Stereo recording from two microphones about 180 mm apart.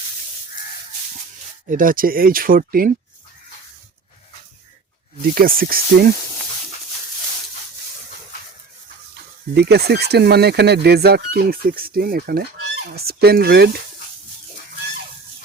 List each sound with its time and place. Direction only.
1.7 s speech: 50° right (ahead or behind)
5.3 s speech: 55° right (ahead or behind)
9.6 s speech: 65° right (ahead or behind)